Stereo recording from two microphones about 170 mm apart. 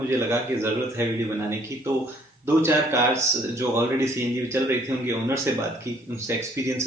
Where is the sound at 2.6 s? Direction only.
15° right (ahead or behind).